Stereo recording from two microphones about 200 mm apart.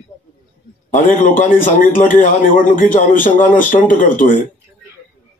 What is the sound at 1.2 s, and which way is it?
A man's voice, 40° left (ahead or behind).